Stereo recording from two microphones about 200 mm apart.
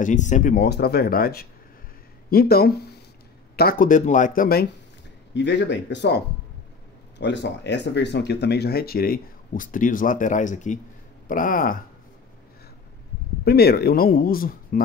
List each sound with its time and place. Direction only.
0.0 s speech: 40° left (ahead or behind)
5.3 s speech: 60° left (ahead or behind); by 11.8 s 45° left (ahead or behind)
13.4 s speech: 50° left (ahead or behind)